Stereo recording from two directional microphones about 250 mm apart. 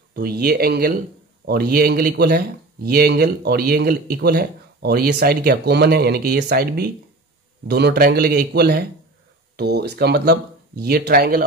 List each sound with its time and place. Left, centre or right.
0.1 s speech: right